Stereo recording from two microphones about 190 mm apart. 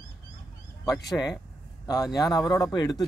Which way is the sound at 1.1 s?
20° left (ahead or behind).